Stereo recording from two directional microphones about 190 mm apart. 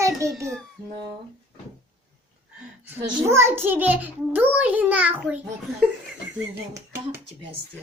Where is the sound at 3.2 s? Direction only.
15° right (ahead or behind).